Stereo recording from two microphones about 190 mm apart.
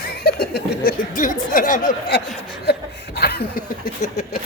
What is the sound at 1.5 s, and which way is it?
Speech, 45° left (ahead or behind).